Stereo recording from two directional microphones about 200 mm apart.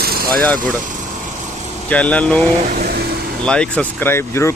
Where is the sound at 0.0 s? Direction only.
50° right (ahead or behind).